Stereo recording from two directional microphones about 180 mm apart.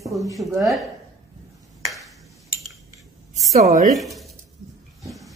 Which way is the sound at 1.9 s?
Centre (ahead or behind).